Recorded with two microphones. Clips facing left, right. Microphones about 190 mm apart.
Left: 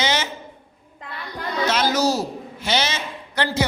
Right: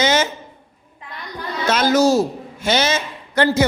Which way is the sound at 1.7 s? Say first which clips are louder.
Right 7 dB; 50° right (ahead or behind).